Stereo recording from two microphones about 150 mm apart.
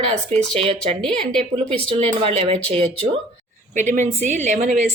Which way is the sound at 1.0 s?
5° left (ahead or behind).